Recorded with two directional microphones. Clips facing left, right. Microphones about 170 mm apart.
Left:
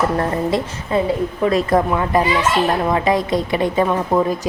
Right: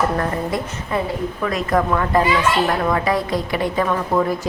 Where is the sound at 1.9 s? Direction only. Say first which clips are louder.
Even; 15° left (ahead or behind).